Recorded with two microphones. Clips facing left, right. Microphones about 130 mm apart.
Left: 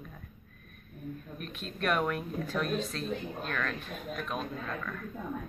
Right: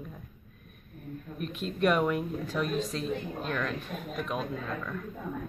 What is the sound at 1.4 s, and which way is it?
Speech, 20° right (ahead or behind).